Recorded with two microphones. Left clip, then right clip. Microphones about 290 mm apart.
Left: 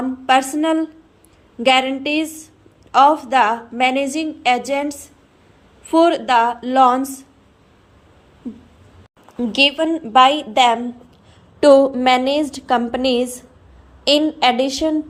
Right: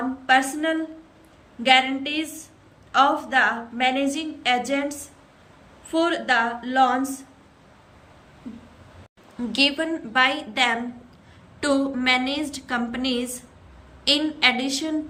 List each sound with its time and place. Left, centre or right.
0.3 s a woman's voice: centre
9.5 s a woman's voice: centre